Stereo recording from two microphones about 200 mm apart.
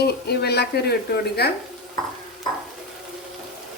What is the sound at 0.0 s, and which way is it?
Speech, 55° left (ahead or behind).